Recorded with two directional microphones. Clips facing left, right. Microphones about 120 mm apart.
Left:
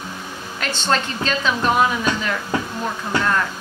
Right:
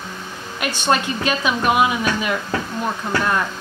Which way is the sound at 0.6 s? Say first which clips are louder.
Right 2 dB; 10° right (ahead or behind).